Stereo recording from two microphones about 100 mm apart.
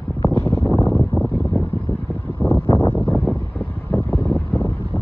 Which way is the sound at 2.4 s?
10° left (ahead or behind).